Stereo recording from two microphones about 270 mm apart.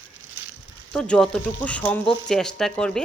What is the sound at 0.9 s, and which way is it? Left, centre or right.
Speech, centre.